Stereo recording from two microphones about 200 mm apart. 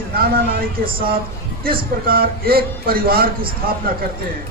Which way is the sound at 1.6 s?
50° right (ahead or behind).